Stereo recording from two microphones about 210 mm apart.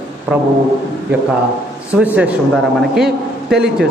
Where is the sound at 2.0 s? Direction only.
5° right (ahead or behind).